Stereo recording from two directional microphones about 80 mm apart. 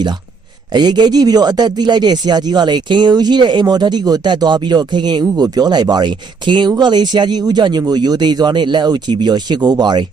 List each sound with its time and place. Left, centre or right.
0.7 s speech: right